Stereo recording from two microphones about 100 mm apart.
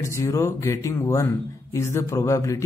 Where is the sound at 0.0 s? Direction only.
30° left (ahead or behind).